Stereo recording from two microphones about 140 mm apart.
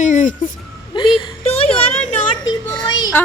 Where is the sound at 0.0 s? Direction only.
65° left (ahead or behind).